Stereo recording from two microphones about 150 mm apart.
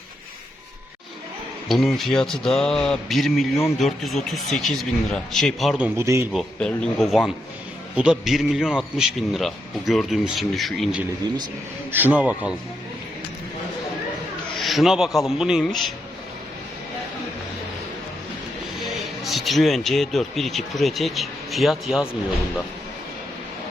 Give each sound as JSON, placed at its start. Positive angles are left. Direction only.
{"t": 1.6, "sound": "speech", "side_deg": 0}
{"t": 5.8, "sound": "speech", "side_deg": -20}
{"t": 6.3, "sound": "speech", "side_deg": 5}
{"t": 11.9, "sound": "speech", "side_deg": -10}
{"t": 14.6, "sound": "speech", "side_deg": 0}
{"t": 18.9, "sound": "speech", "side_deg": 0}